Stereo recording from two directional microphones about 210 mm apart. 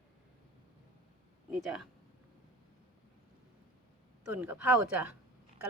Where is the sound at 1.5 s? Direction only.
Centre (ahead or behind).